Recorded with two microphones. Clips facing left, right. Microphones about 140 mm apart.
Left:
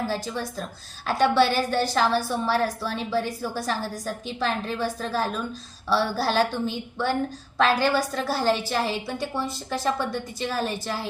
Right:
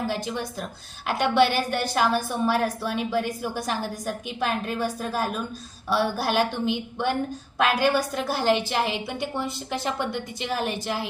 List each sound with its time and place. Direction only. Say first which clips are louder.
1.0 s a woman's voice: left 1 dB; 15° right (ahead or behind)